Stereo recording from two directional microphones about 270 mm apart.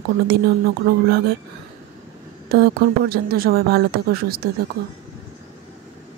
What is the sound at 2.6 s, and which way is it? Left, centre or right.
Speech, right.